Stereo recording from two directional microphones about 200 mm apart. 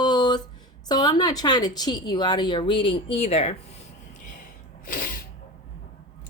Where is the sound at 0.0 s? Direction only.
20° left (ahead or behind).